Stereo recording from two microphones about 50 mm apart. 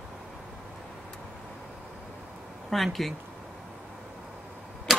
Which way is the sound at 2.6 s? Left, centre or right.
Centre.